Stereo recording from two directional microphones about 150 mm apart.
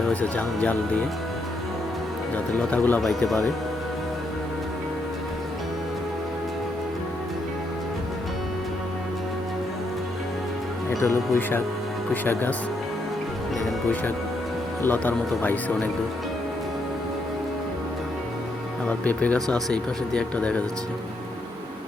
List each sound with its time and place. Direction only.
0.1 s speech: 10° left (ahead or behind)
2.3 s speech: 10° left (ahead or behind)
11.0 s speech: 15° left (ahead or behind)
14.8 s speech: 10° left (ahead or behind)
18.9 s speech: 10° left (ahead or behind)